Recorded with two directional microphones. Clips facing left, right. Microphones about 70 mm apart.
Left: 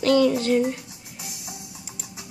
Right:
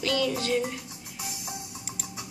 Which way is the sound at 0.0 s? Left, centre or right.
Left.